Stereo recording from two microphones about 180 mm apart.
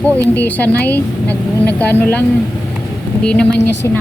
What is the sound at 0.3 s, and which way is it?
A woman's voice, 10° left (ahead or behind).